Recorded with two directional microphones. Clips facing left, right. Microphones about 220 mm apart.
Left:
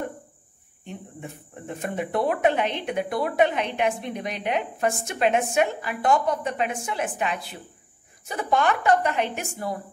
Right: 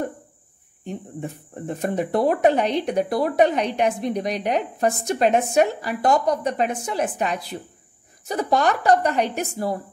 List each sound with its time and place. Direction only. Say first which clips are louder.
0.8 s speech: right 6 dB; 40° right (ahead or behind)